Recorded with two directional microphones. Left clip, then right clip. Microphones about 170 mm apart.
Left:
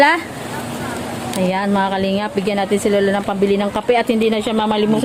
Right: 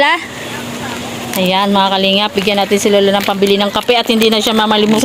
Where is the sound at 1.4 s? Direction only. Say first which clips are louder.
Right 6 dB; 20° right (ahead or behind).